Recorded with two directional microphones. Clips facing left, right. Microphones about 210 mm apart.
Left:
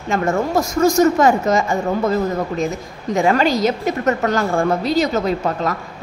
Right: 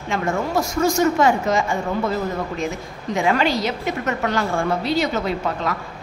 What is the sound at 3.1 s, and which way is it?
A woman's voice, 40° left (ahead or behind).